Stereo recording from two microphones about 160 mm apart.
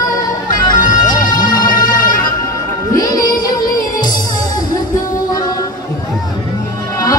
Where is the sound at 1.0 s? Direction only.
25° left (ahead or behind).